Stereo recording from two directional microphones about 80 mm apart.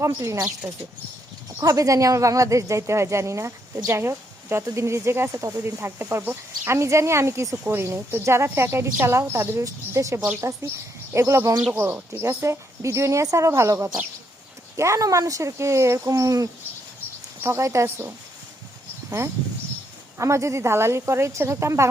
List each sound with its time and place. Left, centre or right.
0.0 s speech: right
17.4 s speech: right
19.2 s speech: right